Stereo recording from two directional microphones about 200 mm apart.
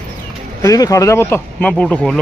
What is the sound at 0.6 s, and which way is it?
Speech, 15° left (ahead or behind).